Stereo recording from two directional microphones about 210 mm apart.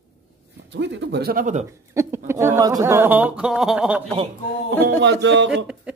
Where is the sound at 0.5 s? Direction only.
55° right (ahead or behind); by 1.6 s 35° right (ahead or behind).